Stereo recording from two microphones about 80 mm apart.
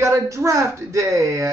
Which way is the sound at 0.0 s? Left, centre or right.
Right.